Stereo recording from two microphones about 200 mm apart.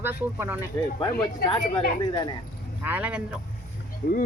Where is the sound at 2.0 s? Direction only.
20° left (ahead or behind).